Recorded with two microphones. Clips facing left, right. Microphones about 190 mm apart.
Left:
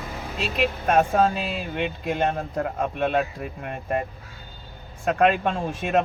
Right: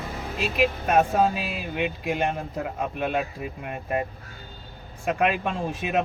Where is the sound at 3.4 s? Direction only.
5° right (ahead or behind).